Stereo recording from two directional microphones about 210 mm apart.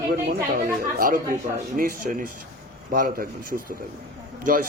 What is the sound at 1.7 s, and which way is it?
Speech, 40° right (ahead or behind).